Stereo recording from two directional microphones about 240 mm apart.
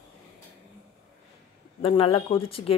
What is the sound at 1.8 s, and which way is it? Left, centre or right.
Speech, left.